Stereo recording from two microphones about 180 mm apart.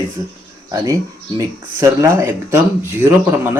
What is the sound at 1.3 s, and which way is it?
Speech, 20° right (ahead or behind).